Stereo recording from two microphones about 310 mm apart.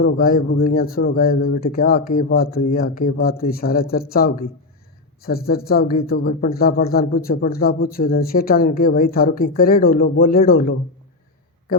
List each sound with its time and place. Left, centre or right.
0.0 s a man's voice: left